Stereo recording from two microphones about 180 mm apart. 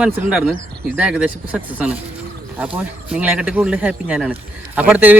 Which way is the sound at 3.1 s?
5° right (ahead or behind).